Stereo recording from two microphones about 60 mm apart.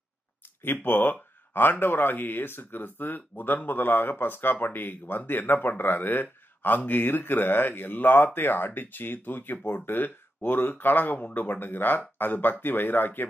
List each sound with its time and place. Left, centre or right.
0.6 s speech: left